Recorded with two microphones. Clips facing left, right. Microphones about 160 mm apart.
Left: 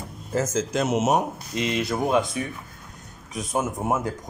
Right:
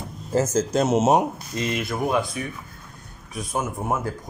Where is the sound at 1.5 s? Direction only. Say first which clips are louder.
Left 2 dB; 20° left (ahead or behind).